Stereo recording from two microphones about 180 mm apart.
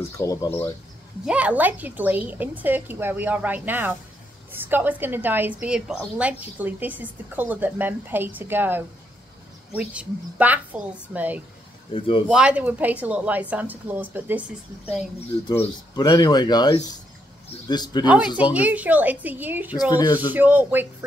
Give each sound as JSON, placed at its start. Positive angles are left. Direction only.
{"t": 0.2, "sound": "speech", "side_deg": 15}
{"t": 1.2, "sound": "a woman's voice", "side_deg": -5}
{"t": 11.9, "sound": "speech", "side_deg": 30}
{"t": 12.3, "sound": "a woman's voice", "side_deg": -5}
{"t": 15.9, "sound": "speech", "side_deg": 25}
{"t": 18.0, "sound": "a woman's voice", "side_deg": -5}